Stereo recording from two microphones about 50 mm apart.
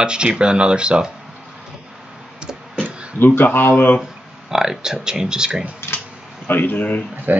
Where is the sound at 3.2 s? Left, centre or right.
Left.